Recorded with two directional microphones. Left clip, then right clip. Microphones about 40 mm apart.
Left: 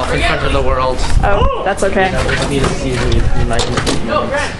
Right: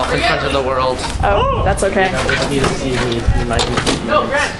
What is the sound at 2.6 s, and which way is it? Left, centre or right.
Speech, right.